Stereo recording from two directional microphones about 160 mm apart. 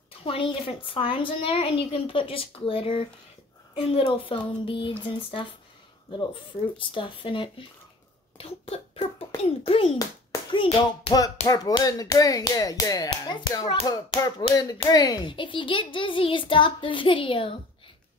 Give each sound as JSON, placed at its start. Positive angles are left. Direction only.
{"t": 0.2, "sound": "a woman's voice", "side_deg": 35}
{"t": 8.4, "sound": "a sound", "side_deg": 40}
{"t": 9.4, "sound": "a woman's voice", "side_deg": 35}